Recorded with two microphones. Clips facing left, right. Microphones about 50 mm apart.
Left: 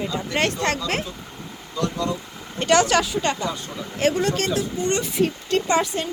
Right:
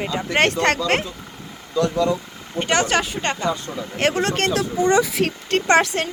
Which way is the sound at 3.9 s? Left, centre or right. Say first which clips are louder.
Right 1 dB; right.